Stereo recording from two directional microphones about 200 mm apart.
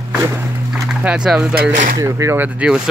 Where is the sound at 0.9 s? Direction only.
5° right (ahead or behind).